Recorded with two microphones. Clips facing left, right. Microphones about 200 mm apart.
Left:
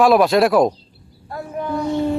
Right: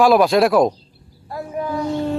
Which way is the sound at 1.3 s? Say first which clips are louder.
Even; centre (ahead or behind).